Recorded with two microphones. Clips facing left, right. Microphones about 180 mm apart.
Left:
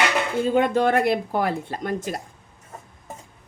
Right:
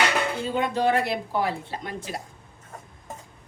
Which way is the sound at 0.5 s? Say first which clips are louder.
Left 4 dB; 50° left (ahead or behind).